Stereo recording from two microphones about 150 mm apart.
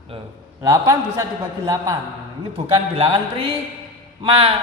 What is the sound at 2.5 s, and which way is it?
Speech, 40° right (ahead or behind).